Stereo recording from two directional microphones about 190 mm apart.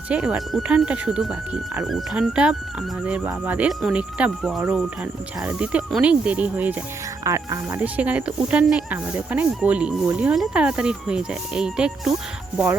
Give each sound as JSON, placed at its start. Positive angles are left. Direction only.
{"t": 0.1, "sound": "speech", "side_deg": -5}